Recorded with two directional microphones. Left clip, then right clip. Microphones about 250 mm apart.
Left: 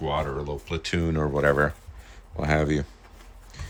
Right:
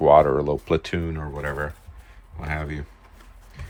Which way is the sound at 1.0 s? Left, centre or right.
Centre.